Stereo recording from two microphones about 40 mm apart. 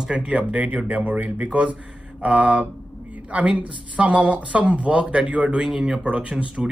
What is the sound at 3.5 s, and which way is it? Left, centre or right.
Speech, right.